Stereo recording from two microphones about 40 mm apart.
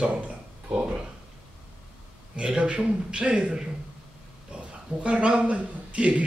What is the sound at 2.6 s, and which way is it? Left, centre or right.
A man's voice, right.